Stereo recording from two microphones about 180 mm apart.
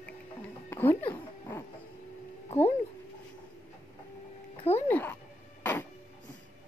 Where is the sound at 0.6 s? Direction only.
10° left (ahead or behind).